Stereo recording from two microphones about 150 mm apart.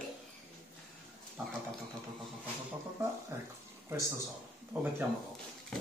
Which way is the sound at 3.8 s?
15° right (ahead or behind).